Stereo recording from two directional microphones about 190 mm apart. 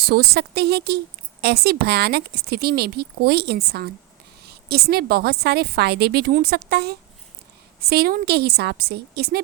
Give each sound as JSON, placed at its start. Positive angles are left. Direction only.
{"t": 0.0, "sound": "speech", "side_deg": -55}